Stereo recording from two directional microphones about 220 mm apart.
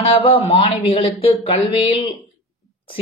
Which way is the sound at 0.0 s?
25° left (ahead or behind).